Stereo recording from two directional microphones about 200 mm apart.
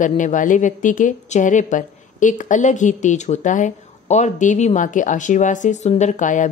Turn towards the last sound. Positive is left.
turn(degrees=40)  # may be behind; listen again after turning